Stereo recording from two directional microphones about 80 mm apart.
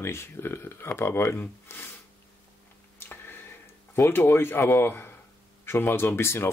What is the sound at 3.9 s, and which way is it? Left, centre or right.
A man's voice, left.